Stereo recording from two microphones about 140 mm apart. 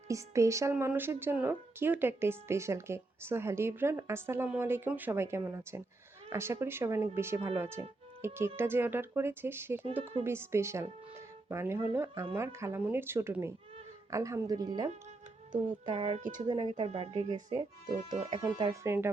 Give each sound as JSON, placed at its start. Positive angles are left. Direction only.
{"t": 0.1, "sound": "a woman's voice", "side_deg": -20}
{"t": 15.9, "sound": "speech", "side_deg": -40}
{"t": 17.3, "sound": "speech", "side_deg": -35}